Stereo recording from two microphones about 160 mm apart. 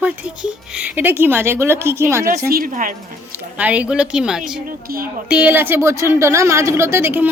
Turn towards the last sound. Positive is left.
turn(degrees=-15)  # may be behind; listen again after turning